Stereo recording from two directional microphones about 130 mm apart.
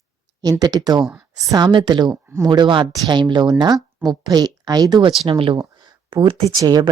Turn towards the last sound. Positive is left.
turn(degrees=-30)  # may be behind; listen again after turning